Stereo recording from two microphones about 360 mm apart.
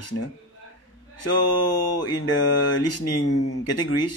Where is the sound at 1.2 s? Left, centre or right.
Left.